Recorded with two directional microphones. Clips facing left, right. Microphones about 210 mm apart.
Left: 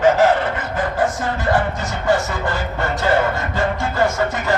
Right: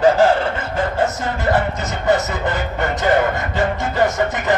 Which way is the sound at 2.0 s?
20° right (ahead or behind).